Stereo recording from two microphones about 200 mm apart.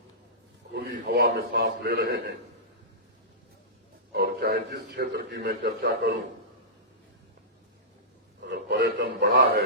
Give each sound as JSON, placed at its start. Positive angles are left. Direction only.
{"t": 0.7, "sound": "a man's voice", "side_deg": -55}
{"t": 4.1, "sound": "a man's voice", "side_deg": -50}
{"t": 8.4, "sound": "a sound", "side_deg": -55}